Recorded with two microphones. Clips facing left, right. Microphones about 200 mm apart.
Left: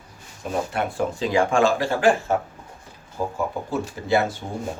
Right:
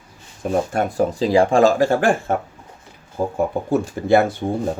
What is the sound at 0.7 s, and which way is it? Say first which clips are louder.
Speech: right 5 dB; 40° right (ahead or behind).